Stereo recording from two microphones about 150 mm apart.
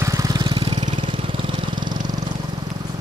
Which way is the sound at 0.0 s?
25° right (ahead or behind).